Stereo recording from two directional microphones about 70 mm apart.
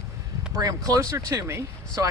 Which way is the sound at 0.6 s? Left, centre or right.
Right.